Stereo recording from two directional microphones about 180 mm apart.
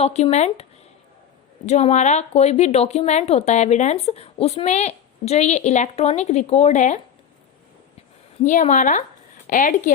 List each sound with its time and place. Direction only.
0.0 s speech: 35° left (ahead or behind)
1.6 s speech: 40° left (ahead or behind)
8.4 s speech: 45° left (ahead or behind)